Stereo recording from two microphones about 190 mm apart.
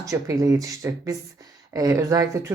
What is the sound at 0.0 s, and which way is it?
Speech, 15° right (ahead or behind).